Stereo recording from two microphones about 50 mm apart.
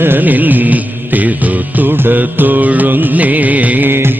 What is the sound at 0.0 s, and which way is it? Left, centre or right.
Music, right.